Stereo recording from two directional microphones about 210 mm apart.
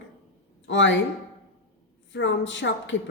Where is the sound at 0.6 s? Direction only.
60° left (ahead or behind).